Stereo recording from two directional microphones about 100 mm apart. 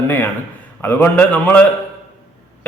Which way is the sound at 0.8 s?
20° left (ahead or behind).